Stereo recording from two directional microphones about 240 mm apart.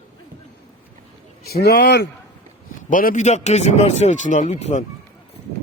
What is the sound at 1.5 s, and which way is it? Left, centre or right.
A man's voice, left.